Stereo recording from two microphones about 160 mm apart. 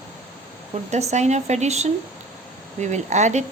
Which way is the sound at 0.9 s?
45° right (ahead or behind).